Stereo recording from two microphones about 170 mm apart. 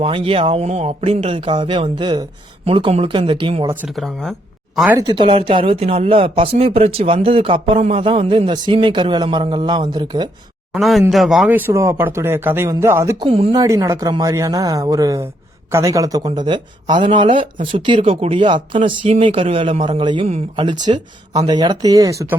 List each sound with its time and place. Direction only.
0.0 s speech: 30° right (ahead or behind)
3.8 s speech: centre (ahead or behind)
4.9 s speech: 25° right (ahead or behind)
10.7 s speech: centre (ahead or behind); by 13.2 s 15° right (ahead or behind)
13.3 s speech: 30° right (ahead or behind)